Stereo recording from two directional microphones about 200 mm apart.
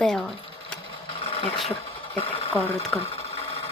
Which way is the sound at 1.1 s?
25° left (ahead or behind).